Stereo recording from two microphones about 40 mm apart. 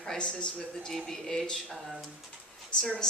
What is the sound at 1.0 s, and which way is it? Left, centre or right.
Speech, centre.